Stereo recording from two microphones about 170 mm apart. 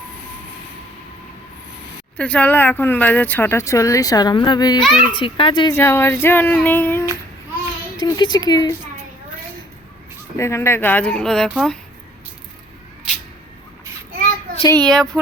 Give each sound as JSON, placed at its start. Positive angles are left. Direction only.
{"t": 2.1, "sound": "speech", "side_deg": 10}
{"t": 4.8, "sound": "a woman's voice", "side_deg": 0}
{"t": 5.1, "sound": "speech", "side_deg": 30}
{"t": 5.7, "sound": "speech", "side_deg": 15}
{"t": 8.0, "sound": "speech", "side_deg": 25}
{"t": 10.3, "sound": "speech", "side_deg": 15}
{"t": 14.7, "sound": "a woman's voice", "side_deg": 5}